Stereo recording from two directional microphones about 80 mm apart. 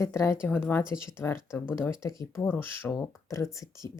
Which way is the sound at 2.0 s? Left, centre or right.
Left.